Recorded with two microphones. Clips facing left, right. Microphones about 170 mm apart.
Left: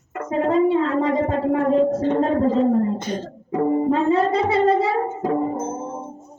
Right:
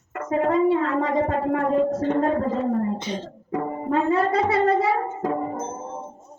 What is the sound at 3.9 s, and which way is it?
Speech, 25° left (ahead or behind).